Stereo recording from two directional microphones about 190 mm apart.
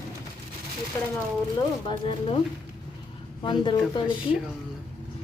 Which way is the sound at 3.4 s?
25° left (ahead or behind).